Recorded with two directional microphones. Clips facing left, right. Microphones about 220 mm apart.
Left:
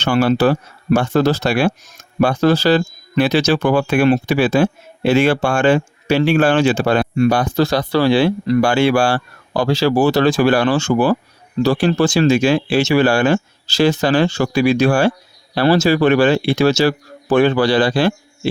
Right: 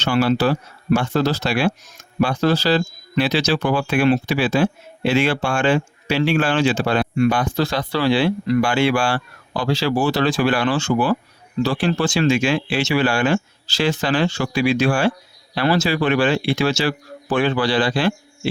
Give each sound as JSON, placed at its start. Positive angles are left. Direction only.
{"t": 0.0, "sound": "speech", "side_deg": 50}